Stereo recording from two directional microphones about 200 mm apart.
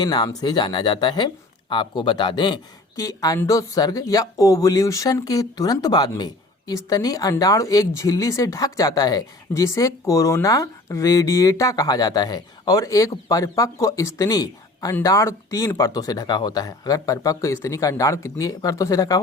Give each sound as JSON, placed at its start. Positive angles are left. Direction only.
{"t": 0.0, "sound": "speech", "side_deg": 20}